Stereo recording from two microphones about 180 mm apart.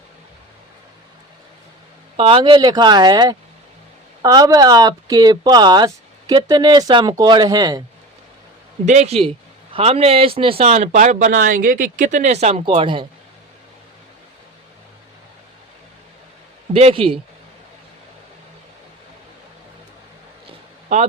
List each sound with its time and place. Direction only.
2.1 s speech: 30° right (ahead or behind)
8.9 s speech: 40° right (ahead or behind)
16.7 s speech: 30° right (ahead or behind)
20.9 s speech: 35° right (ahead or behind)